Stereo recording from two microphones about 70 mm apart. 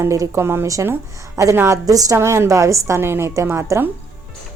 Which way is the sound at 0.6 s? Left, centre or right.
Right.